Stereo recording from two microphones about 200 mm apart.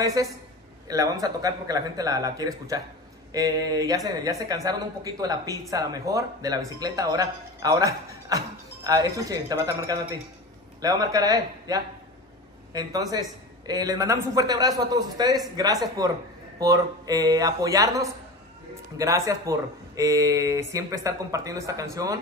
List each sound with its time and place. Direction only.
0.0 s a man's voice: 15° right (ahead or behind)